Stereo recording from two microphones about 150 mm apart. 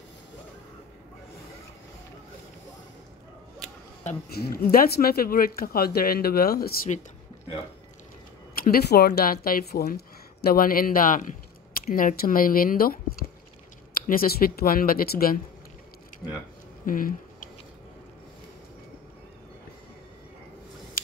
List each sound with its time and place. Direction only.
4.3 s speech: 90° left
8.5 s speech: 90° left; by 13.0 s 75° left (ahead or behind)
14.0 s speech: 75° left (ahead or behind)
16.8 s a sound: 65° left (ahead or behind)